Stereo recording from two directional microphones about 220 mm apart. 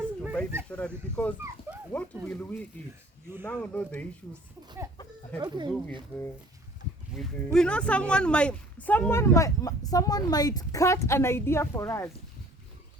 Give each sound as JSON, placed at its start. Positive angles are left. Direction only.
{"t": 0.2, "sound": "snake", "side_deg": 0}
{"t": 0.7, "sound": "speech", "side_deg": 5}
{"t": 1.7, "sound": "dog", "side_deg": -5}
{"t": 2.2, "sound": "a woman's voice", "side_deg": 5}
{"t": 5.4, "sound": "speech", "side_deg": -20}
{"t": 7.2, "sound": "a woman's voice", "side_deg": 5}